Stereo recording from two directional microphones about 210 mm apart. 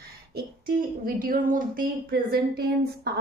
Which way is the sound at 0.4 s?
45° right (ahead or behind).